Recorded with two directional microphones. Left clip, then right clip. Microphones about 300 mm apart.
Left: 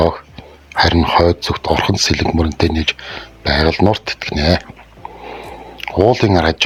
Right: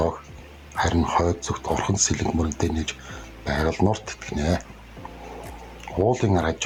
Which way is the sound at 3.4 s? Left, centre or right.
Left.